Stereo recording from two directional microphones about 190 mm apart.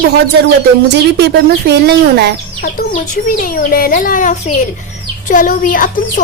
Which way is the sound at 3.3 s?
50° left (ahead or behind).